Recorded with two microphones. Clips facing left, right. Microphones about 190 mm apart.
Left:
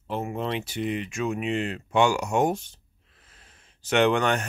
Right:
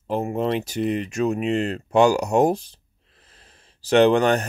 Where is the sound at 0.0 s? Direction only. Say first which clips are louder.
Right 6 dB; 40° right (ahead or behind).